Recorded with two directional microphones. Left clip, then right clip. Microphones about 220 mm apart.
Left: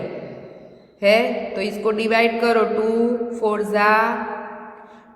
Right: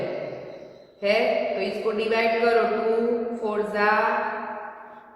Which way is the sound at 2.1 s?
50° left (ahead or behind).